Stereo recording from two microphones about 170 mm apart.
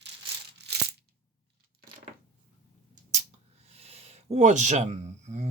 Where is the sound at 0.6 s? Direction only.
80° right.